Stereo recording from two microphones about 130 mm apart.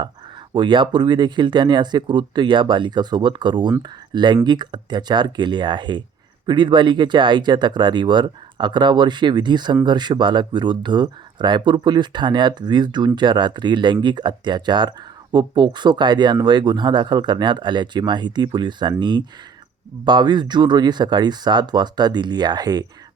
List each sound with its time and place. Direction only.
0.5 s speech: 35° right (ahead or behind)